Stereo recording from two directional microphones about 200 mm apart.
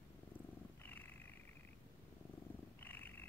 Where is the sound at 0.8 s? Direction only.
10° left (ahead or behind).